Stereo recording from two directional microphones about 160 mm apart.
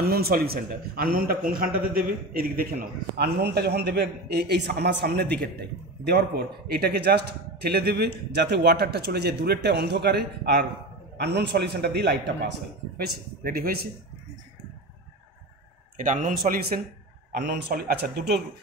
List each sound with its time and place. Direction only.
0.0 s a man's voice: 70° right (ahead or behind); by 12.2 s 90° right
12.9 s a man's voice: 70° right (ahead or behind)
16.0 s speech: 55° right (ahead or behind)
17.4 s speech: 90° right; by 18.4 s 70° right (ahead or behind)